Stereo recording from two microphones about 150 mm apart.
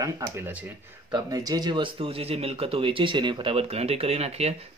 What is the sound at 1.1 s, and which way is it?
Speech, 25° right (ahead or behind).